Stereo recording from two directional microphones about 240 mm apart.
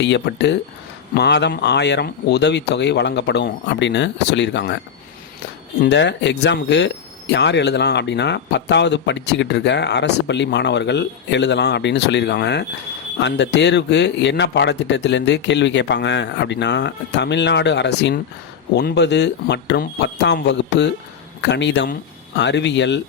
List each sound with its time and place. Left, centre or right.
0.0 s speech: left
5.8 s speech: left